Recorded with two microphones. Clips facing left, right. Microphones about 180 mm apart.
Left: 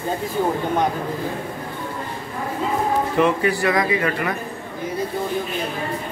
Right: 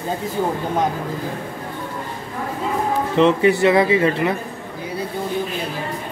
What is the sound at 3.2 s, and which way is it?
Speech, 25° right (ahead or behind).